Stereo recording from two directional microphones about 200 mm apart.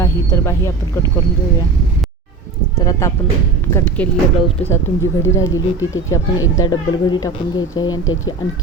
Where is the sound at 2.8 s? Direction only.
15° left (ahead or behind).